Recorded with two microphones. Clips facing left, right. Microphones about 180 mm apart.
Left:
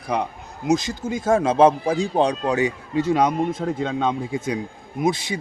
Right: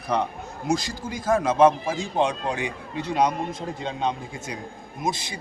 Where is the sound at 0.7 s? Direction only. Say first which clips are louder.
Left 5 dB; 20° left (ahead or behind); by 3.2 s 40° left (ahead or behind).